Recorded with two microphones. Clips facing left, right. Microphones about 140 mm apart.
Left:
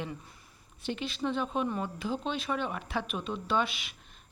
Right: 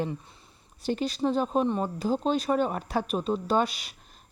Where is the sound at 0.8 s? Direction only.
40° right (ahead or behind).